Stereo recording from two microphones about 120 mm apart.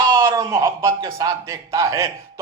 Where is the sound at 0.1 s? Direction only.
30° right (ahead or behind).